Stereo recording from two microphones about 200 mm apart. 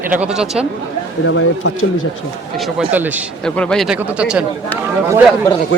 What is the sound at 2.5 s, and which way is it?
Speech, centre (ahead or behind).